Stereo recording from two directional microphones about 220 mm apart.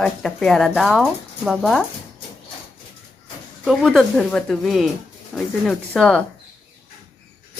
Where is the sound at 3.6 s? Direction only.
Centre (ahead or behind).